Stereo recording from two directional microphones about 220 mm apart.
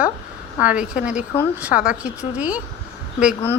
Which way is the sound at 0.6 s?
5° right (ahead or behind).